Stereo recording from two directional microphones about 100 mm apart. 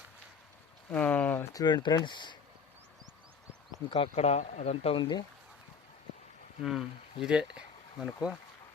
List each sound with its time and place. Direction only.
0.9 s a sound: 15° left (ahead or behind)
1.5 s speech: 45° left (ahead or behind)
3.8 s speech: 65° left (ahead or behind); by 4.9 s 90° left
4.9 s speech: 50° left (ahead or behind)
6.6 s speech: 5° right (ahead or behind)